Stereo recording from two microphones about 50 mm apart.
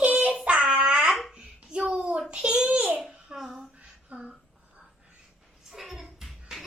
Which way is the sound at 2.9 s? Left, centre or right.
Centre.